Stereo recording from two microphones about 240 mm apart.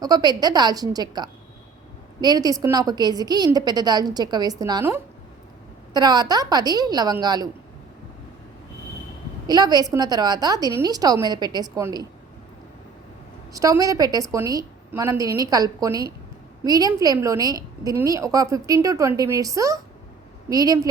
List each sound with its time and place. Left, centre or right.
0.0 s a woman's voice: centre
9.5 s a woman's voice: centre
13.5 s a woman's voice: centre